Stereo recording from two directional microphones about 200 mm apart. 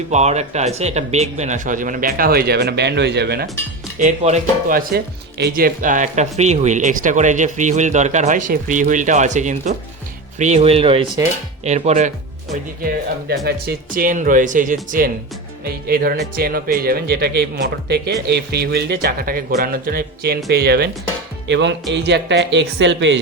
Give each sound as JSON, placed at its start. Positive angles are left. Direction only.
{"t": 0.1, "sound": "speech", "side_deg": -35}
{"t": 3.9, "sound": "speech", "side_deg": -35}
{"t": 4.9, "sound": "speech", "side_deg": -50}
{"t": 12.8, "sound": "speech", "side_deg": -50}